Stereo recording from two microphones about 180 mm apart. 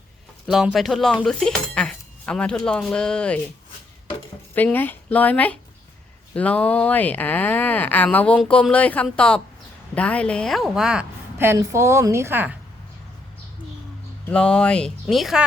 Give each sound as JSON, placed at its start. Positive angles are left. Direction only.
{"t": 0.4, "sound": "speech", "side_deg": 0}
{"t": 4.5, "sound": "a woman's voice", "side_deg": 10}
{"t": 14.3, "sound": "speech", "side_deg": 5}